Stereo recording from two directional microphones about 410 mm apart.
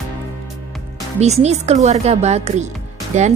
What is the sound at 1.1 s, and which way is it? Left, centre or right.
Speech, centre.